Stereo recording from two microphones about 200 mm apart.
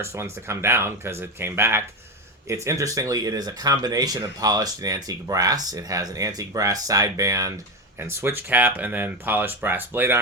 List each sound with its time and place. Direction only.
0.0 s speech: 15° right (ahead or behind)